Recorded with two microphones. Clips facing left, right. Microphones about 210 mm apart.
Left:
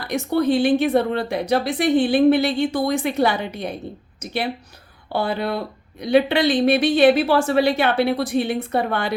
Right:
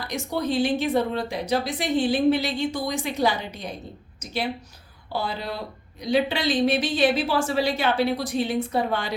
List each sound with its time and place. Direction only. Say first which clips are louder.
0.0 s a woman's voice: left 7 dB; 60° left (ahead or behind)
5.1 s a woman's voice: left 7 dB; 60° left (ahead or behind)